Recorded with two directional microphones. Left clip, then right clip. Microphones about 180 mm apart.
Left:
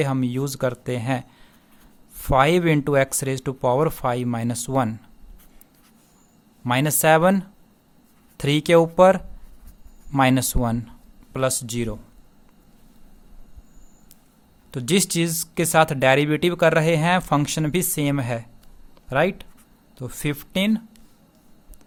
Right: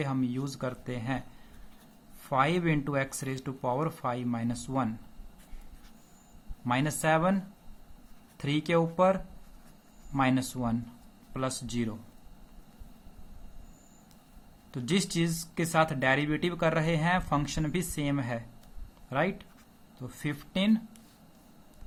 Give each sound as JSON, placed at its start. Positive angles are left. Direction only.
{"t": 0.0, "sound": "speech", "side_deg": 55}
{"t": 2.2, "sound": "speech", "side_deg": 60}
{"t": 6.7, "sound": "speech", "side_deg": 55}
{"t": 14.7, "sound": "speech", "side_deg": 55}